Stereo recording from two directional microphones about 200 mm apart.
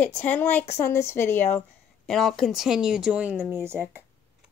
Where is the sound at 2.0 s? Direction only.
Centre (ahead or behind).